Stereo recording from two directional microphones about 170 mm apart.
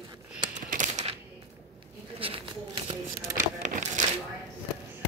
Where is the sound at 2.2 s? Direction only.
35° right (ahead or behind).